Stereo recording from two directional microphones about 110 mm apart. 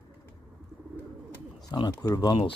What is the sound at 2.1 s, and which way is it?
Speech, 40° left (ahead or behind).